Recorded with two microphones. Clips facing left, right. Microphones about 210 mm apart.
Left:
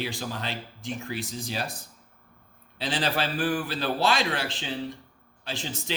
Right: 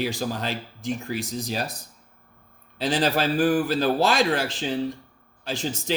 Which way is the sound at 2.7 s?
40° right (ahead or behind).